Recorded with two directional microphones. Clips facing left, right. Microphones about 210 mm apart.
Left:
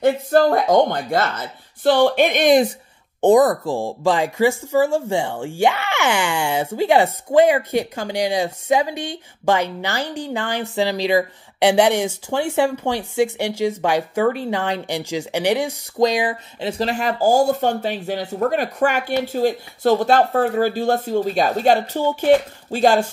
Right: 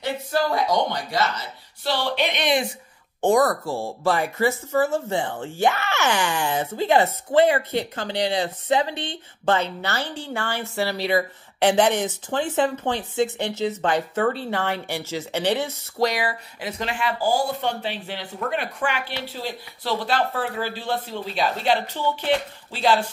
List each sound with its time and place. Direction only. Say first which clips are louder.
0.0 s speech: left 9 dB; 50° left (ahead or behind)
3.2 s a woman's voice: left 5 dB; 20° left (ahead or behind); by 23.0 s 45° left (ahead or behind)